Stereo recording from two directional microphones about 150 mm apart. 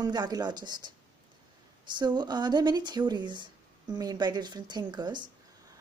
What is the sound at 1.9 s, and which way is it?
Speech, 30° right (ahead or behind).